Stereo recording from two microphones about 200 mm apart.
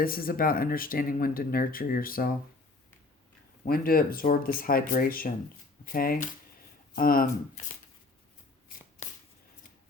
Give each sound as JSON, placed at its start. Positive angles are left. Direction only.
{"t": 0.0, "sound": "speech", "side_deg": 45}
{"t": 3.6, "sound": "speech", "side_deg": 45}